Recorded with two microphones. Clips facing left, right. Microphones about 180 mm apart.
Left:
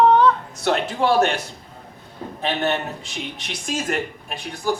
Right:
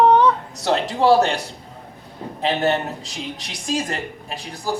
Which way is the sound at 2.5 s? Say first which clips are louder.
Right 3 dB; 35° right (ahead or behind).